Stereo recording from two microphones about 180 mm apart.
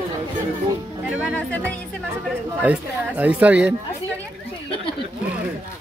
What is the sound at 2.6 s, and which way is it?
Speech, 10° right (ahead or behind).